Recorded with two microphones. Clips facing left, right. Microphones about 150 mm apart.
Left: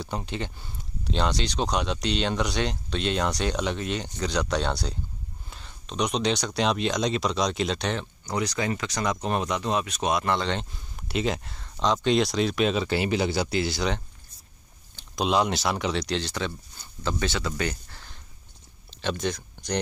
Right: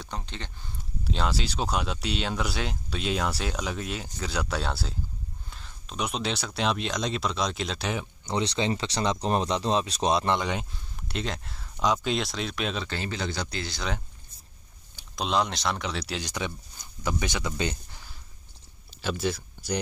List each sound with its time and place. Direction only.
0.0 s speech: 10° left (ahead or behind)
1.0 s speech: 5° right (ahead or behind)
8.3 s speech: 25° right (ahead or behind)
10.3 s speech: 10° right (ahead or behind)
11.1 s speech: 5° left (ahead or behind)
15.1 s speech: 5° left (ahead or behind)
16.2 s speech: 15° right (ahead or behind)
18.9 s a sound: 5° right (ahead or behind)